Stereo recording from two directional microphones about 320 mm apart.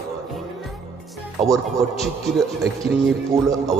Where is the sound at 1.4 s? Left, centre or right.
Centre.